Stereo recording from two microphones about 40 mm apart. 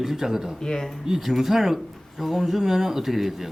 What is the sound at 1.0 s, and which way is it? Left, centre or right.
Speech, centre.